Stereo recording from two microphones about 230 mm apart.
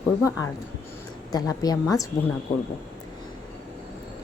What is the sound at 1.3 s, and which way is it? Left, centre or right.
Speech, centre.